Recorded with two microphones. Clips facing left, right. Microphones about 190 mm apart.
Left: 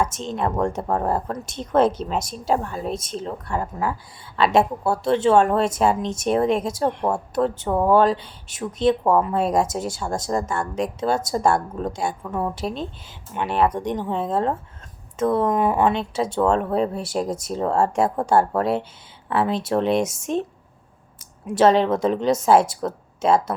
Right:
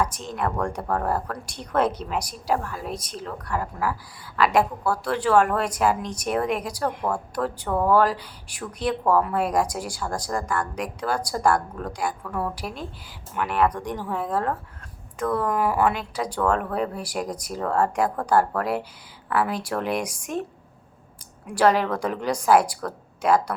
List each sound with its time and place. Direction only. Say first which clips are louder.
0.0 s speech: left 2 dB; 25° left (ahead or behind)
21.4 s speech: left 4 dB; 25° left (ahead or behind)